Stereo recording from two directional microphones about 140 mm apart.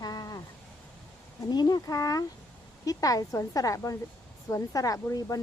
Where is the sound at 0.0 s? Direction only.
25° left (ahead or behind).